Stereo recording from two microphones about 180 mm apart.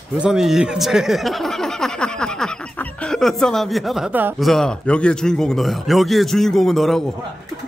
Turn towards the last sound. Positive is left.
turn(degrees=0)  # may be behind; listen again after turning